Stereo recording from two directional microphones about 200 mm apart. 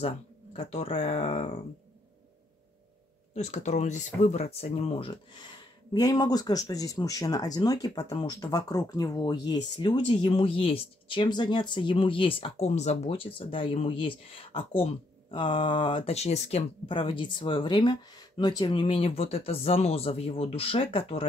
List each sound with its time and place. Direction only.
0.0 s speech: 30° left (ahead or behind)
3.3 s speech: 35° left (ahead or behind)